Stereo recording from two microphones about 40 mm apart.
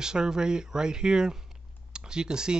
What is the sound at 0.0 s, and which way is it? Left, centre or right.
Speech, centre.